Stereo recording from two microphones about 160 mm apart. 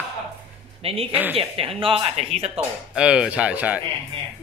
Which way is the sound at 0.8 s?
35° right (ahead or behind).